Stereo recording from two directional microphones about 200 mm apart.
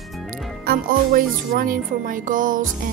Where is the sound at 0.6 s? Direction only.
45° right (ahead or behind).